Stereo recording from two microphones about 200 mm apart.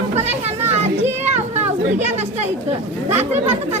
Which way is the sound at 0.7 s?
35° right (ahead or behind).